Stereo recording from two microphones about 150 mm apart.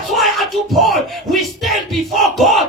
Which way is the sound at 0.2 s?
Centre (ahead or behind).